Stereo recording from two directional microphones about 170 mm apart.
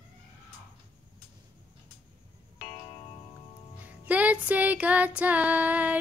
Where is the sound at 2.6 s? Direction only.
40° left (ahead or behind).